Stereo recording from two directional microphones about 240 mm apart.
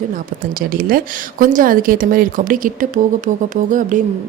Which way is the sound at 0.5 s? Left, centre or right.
Right.